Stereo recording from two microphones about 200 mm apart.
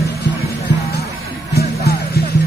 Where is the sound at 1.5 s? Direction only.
50° left (ahead or behind).